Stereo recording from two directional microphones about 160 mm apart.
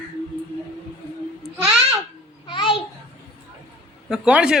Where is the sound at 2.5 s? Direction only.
30° left (ahead or behind).